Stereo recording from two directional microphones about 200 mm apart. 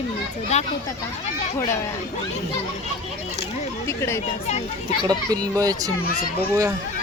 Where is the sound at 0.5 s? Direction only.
35° left (ahead or behind).